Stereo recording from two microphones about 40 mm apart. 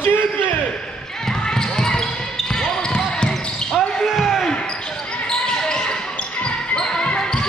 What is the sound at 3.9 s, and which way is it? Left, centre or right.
Basketball bounce, centre.